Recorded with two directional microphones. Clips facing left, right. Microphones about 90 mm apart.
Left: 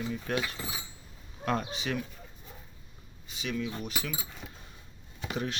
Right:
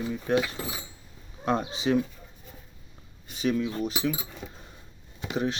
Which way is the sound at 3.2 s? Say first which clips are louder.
Right 7 dB; 40° right (ahead or behind).